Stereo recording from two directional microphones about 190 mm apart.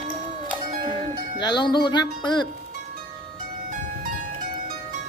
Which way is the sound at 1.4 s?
25° left (ahead or behind).